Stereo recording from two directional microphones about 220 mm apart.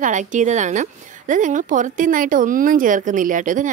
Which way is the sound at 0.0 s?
35° right (ahead or behind).